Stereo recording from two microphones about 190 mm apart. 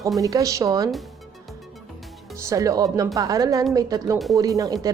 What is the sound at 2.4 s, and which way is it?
Speech, 15° right (ahead or behind).